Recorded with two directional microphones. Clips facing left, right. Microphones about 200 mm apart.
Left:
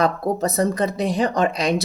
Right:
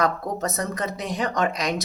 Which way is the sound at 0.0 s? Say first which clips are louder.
Left 4 dB; 30° left (ahead or behind).